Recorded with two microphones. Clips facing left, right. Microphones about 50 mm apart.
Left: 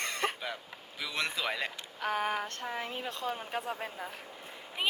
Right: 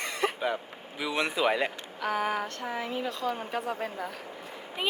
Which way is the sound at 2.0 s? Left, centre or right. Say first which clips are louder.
Right 3 dB; right.